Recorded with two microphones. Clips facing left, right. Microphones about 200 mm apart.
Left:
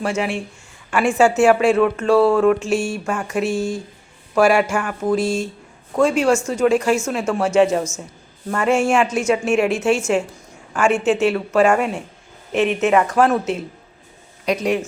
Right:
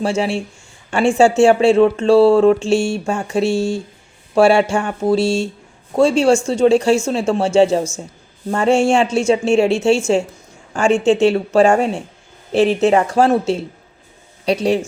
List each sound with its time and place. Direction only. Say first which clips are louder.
0.0 s speech: right 3 dB; 30° right (ahead or behind)